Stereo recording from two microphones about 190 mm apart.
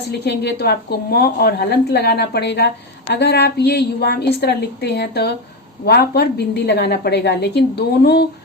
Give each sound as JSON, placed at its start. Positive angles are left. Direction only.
{"t": 0.1, "sound": "a woman's voice", "side_deg": 60}